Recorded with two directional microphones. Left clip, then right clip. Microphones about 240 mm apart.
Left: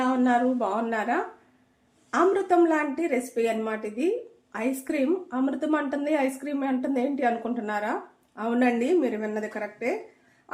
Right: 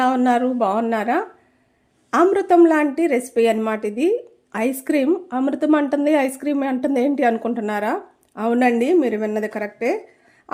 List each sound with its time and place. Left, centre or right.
0.0 s a woman's voice: right